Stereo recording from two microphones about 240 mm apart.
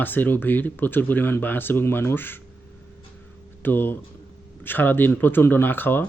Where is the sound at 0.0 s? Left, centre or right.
Centre.